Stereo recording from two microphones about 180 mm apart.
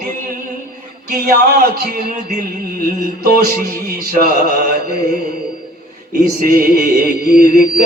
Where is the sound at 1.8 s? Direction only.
60° right (ahead or behind).